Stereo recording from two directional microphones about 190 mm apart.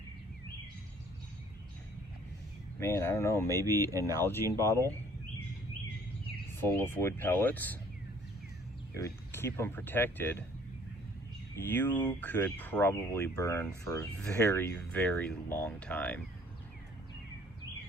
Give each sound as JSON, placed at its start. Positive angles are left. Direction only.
{"t": 2.7, "sound": "speech", "side_deg": 15}
{"t": 3.6, "sound": "speech", "side_deg": -15}
{"t": 4.2, "sound": "speech", "side_deg": 15}
{"t": 6.6, "sound": "speech", "side_deg": 10}
{"t": 9.0, "sound": "speech", "side_deg": 15}
{"t": 11.5, "sound": "speech", "side_deg": 10}